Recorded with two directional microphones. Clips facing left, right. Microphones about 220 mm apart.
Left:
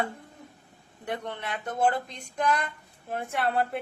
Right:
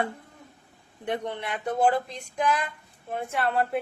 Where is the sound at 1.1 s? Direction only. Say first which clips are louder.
Right 3 dB; 15° right (ahead or behind).